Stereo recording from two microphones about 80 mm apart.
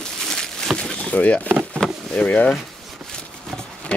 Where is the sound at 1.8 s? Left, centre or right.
Centre.